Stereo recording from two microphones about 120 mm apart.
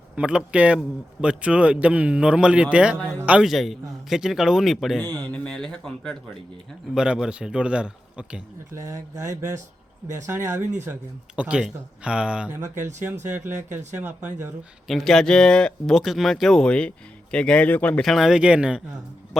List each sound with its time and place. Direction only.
0.2 s a man's voice: 10° right (ahead or behind)
3.5 s speech: centre (ahead or behind)
4.9 s speech: 10° left (ahead or behind)
6.9 s a man's voice: 5° right (ahead or behind)
8.7 s speech: 25° right (ahead or behind)
11.3 s a man's voice: 10° right (ahead or behind)
14.8 s speech: centre (ahead or behind)
18.0 s a man's voice: centre (ahead or behind)